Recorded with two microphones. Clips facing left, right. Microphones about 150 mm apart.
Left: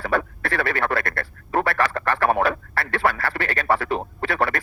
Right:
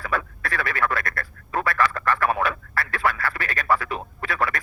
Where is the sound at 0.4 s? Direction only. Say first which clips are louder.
Left 2 dB; 30° left (ahead or behind).